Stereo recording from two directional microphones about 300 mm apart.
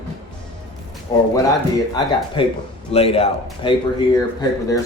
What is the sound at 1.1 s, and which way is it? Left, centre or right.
Speech, centre.